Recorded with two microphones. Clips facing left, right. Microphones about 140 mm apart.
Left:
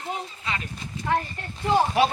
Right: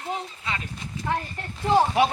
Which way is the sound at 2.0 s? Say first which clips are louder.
Even; 20° right (ahead or behind).